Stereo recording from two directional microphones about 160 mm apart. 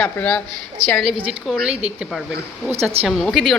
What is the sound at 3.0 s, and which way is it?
Speech, centre (ahead or behind).